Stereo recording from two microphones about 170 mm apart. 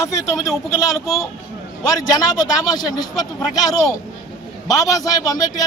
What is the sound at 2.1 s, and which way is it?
A man's voice, 20° left (ahead or behind).